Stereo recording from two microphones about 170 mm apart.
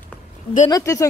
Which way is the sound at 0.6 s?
20° left (ahead or behind).